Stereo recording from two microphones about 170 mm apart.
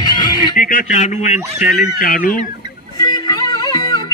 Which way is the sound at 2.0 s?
60° left (ahead or behind).